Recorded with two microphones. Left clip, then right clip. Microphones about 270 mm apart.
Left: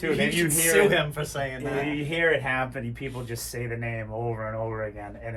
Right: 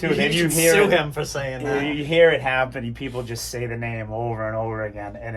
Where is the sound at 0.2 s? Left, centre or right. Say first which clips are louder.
Right 5 dB; right.